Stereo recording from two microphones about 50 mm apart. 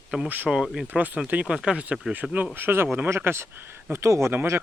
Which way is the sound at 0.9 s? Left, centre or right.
Right.